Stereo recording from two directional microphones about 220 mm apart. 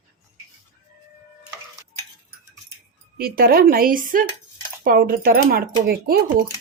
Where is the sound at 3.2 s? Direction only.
45° right (ahead or behind).